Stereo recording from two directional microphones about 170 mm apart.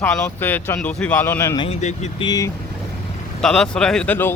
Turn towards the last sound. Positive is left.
turn(degrees=10)  # may be behind; listen again after turning